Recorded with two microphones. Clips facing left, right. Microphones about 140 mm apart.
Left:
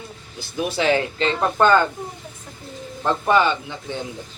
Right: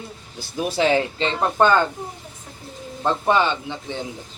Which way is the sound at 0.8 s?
25° right (ahead or behind).